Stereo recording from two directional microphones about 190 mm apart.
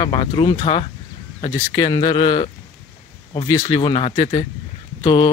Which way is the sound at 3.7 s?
25° left (ahead or behind).